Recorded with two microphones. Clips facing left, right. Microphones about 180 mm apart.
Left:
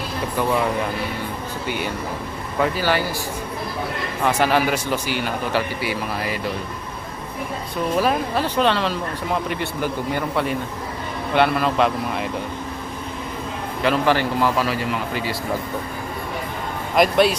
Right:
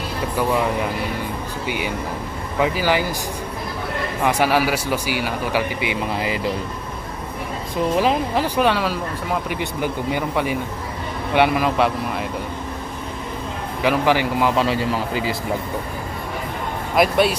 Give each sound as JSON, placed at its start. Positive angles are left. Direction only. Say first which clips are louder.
{"t": 1.6, "sound": "speech", "louder": "right 1 dB", "side_deg": -10}
{"t": 4.2, "sound": "speech", "louder": "even", "side_deg": -10}
{"t": 7.9, "sound": "speech", "louder": "even", "side_deg": -15}
{"t": 13.8, "sound": "speech", "louder": "right 1 dB", "side_deg": -15}
{"t": 14.5, "sound": "a man's voice", "louder": "right 3 dB", "side_deg": -25}
{"t": 16.9, "sound": "speech", "louder": "left 1 dB", "side_deg": -5}